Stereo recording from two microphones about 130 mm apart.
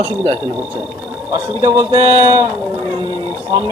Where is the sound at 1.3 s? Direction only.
40° right (ahead or behind).